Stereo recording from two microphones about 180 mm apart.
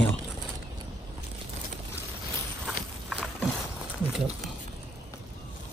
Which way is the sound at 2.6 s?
Centre (ahead or behind).